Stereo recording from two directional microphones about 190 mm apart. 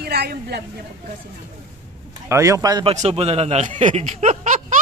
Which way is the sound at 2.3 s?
15° right (ahead or behind).